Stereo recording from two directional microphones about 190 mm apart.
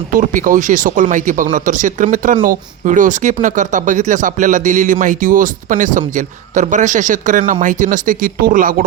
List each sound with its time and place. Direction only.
0.1 s speech: 45° right (ahead or behind)